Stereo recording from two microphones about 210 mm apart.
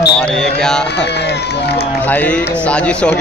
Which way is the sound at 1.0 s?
55° left (ahead or behind).